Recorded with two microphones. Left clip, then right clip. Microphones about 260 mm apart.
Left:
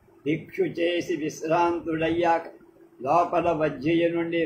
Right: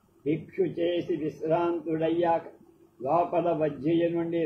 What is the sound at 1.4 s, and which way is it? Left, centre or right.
Speech, left.